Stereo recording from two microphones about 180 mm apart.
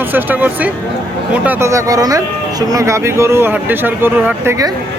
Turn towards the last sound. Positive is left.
turn(degrees=-15)  # may be behind; listen again after turning